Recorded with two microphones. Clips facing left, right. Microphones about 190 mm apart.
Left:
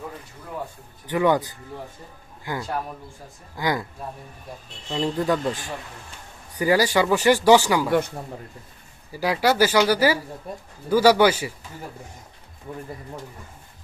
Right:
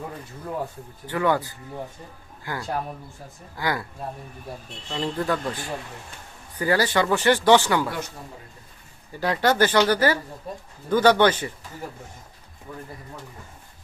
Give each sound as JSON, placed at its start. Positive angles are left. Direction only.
{"t": 1.0, "sound": "speech", "side_deg": 15}
{"t": 4.9, "sound": "speech", "side_deg": 15}
{"t": 7.9, "sound": "speech", "side_deg": 60}
{"t": 9.1, "sound": "speech", "side_deg": 10}
{"t": 12.7, "sound": "speech", "side_deg": 25}